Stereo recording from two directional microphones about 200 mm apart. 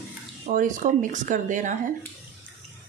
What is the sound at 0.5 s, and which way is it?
Speech, 40° right (ahead or behind).